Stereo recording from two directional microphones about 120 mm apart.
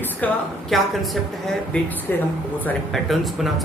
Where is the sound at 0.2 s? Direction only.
10° left (ahead or behind).